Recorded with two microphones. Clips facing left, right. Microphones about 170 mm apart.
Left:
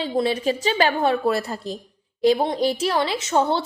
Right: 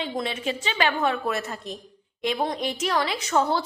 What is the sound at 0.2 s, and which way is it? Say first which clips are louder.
Speech: left 10 dB; 35° left (ahead or behind).